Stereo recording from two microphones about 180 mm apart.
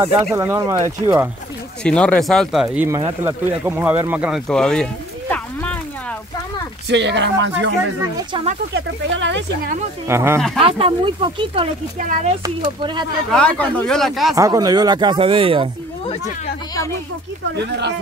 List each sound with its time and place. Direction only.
0.0 s speech: 15° right (ahead or behind)
1.8 s speech: 5° left (ahead or behind)
2.9 s speech: 15° right (ahead or behind)
4.5 s speech: 5° left (ahead or behind)
5.3 s a sound: 10° left (ahead or behind)
6.9 s speech: 75° right (ahead or behind)
8.7 s speech: 85° right
10.0 s speech: 15° right (ahead or behind)
10.6 s speech: 30° right (ahead or behind)
13.3 s speech: 5° left (ahead or behind)
14.3 s speech: 20° right (ahead or behind)
17.6 s speech: 70° right (ahead or behind)